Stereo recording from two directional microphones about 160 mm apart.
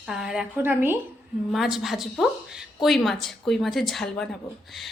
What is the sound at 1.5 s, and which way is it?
A woman's voice, centre (ahead or behind).